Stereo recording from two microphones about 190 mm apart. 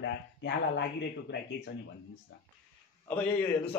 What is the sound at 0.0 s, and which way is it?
Speech, 65° left (ahead or behind).